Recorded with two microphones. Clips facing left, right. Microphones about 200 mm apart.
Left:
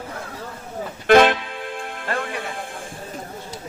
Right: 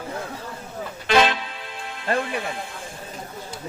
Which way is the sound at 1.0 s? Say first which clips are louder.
Left 6 dB; 55° left (ahead or behind).